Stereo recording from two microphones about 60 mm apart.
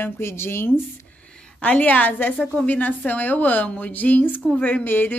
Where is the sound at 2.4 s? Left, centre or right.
Centre.